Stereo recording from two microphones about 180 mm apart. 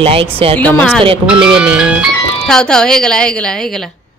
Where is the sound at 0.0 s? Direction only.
30° right (ahead or behind).